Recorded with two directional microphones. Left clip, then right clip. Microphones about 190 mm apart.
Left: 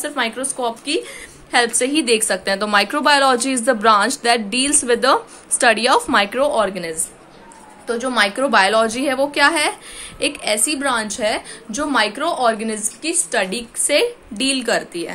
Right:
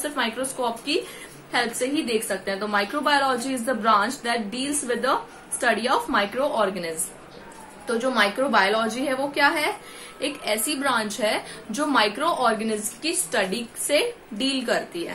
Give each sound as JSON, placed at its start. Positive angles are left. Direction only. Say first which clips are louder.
{"t": 0.0, "sound": "a woman's voice", "louder": "left 4 dB", "side_deg": 35}
{"t": 1.5, "sound": "a woman's voice", "louder": "left 8 dB", "side_deg": 45}